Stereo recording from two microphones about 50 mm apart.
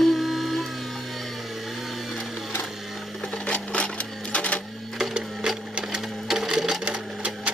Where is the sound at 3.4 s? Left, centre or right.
Left.